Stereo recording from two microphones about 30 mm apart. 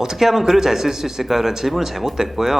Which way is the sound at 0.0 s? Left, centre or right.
Centre.